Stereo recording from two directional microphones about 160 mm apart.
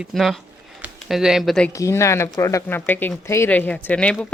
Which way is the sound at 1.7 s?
20° left (ahead or behind).